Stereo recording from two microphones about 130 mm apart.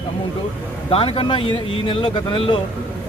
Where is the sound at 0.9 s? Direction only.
45° left (ahead or behind).